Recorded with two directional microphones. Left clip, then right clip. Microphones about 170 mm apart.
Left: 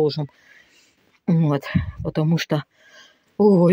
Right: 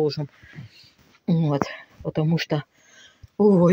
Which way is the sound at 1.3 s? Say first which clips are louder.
Left 1 dB; 35° left (ahead or behind).